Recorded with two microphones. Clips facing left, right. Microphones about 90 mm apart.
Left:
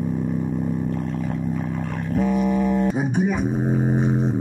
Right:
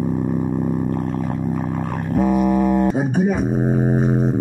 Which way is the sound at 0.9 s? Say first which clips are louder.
Right 3 dB; 40° right (ahead or behind).